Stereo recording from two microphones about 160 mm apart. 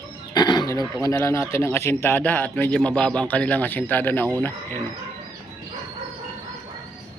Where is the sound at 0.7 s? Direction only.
20° left (ahead or behind).